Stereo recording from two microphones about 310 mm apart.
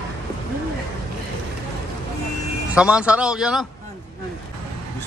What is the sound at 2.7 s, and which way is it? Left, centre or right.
Speech, centre.